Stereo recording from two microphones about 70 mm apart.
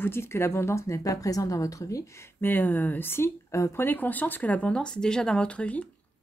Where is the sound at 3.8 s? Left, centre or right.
Left.